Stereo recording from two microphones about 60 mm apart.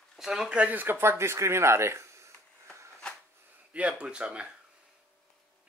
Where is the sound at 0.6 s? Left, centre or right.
Right.